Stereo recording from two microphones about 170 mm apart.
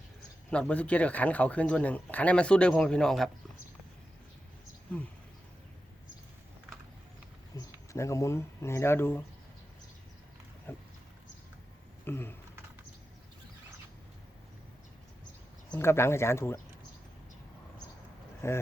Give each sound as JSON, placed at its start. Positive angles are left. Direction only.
{"t": 0.5, "sound": "speech", "side_deg": 5}
{"t": 7.5, "sound": "speech", "side_deg": 20}
{"t": 10.7, "sound": "a sound", "side_deg": 10}
{"t": 12.0, "sound": "speech", "side_deg": 15}
{"t": 15.7, "sound": "speech", "side_deg": 15}
{"t": 18.4, "sound": "speech", "side_deg": 15}